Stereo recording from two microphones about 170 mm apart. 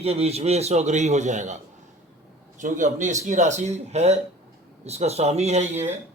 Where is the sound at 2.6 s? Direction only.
50° right (ahead or behind).